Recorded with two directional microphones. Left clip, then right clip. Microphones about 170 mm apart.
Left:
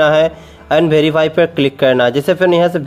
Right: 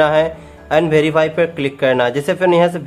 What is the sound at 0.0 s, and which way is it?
A man's voice, 30° left (ahead or behind).